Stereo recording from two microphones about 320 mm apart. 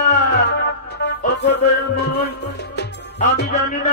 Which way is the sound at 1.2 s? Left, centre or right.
Left.